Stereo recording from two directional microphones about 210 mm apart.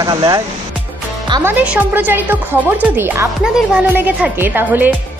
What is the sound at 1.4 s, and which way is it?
A woman's voice, 5° right (ahead or behind).